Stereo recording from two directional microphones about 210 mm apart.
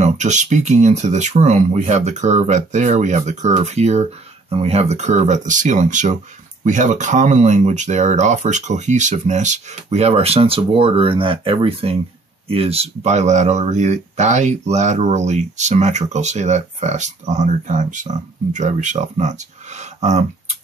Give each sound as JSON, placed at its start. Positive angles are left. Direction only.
{"t": 0.0, "sound": "speech", "side_deg": -35}